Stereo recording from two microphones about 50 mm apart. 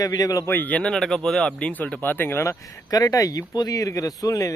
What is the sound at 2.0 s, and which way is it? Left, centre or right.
Speech, left.